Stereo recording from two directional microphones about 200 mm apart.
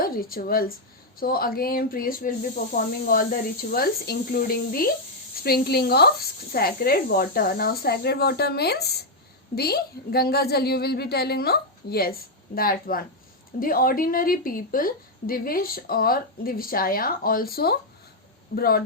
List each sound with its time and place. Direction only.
0.0 s a woman's voice: 45° left (ahead or behind)